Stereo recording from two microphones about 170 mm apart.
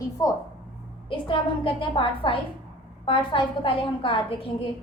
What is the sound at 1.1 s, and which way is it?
A woman's voice, 30° left (ahead or behind).